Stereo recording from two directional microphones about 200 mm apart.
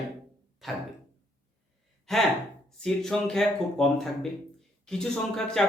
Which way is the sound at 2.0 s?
Centre (ahead or behind).